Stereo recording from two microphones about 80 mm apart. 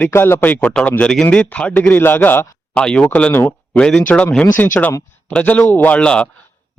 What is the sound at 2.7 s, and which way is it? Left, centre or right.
Speech, centre.